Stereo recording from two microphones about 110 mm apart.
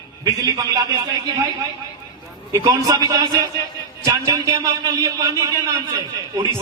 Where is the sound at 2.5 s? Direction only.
30° right (ahead or behind).